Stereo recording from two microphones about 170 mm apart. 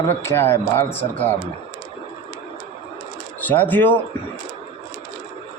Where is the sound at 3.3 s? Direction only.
10° left (ahead or behind).